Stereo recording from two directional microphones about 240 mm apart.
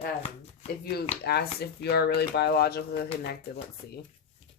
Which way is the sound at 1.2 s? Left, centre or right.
Left.